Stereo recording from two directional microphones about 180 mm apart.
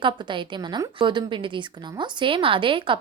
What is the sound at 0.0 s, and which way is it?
A woman's voice, 25° right (ahead or behind).